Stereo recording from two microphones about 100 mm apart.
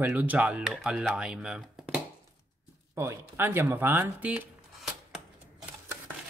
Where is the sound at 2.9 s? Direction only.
25° right (ahead or behind).